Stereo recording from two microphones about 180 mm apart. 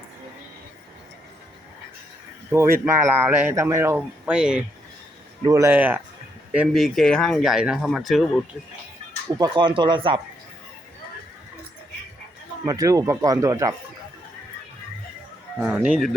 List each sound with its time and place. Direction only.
2.5 s speech: 15° right (ahead or behind)
5.4 s speech: 20° right (ahead or behind); by 8.4 s centre (ahead or behind)
9.4 s speech: 25° right (ahead or behind)
12.6 s speech: 20° right (ahead or behind)
15.5 s speech: 5° right (ahead or behind)